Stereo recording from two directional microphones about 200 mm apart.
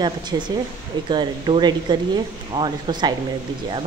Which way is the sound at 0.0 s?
20° right (ahead or behind).